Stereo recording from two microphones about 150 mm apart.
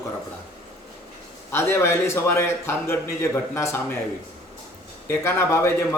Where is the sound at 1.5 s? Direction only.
15° left (ahead or behind).